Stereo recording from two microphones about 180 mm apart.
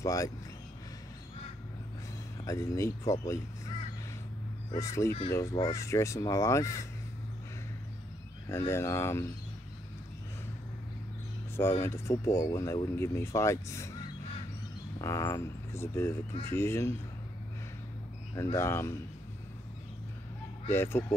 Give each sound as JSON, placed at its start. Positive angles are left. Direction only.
{"t": 0.0, "sound": "speech", "side_deg": 20}
{"t": 2.4, "sound": "speech", "side_deg": 15}
{"t": 4.6, "sound": "speech", "side_deg": 15}
{"t": 8.5, "sound": "speech", "side_deg": 15}
{"t": 11.8, "sound": "speech", "side_deg": 15}
{"t": 15.0, "sound": "speech", "side_deg": 15}
{"t": 18.3, "sound": "speech", "side_deg": 15}
{"t": 20.6, "sound": "speech", "side_deg": 10}